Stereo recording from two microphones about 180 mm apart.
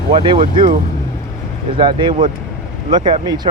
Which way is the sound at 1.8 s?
25° right (ahead or behind).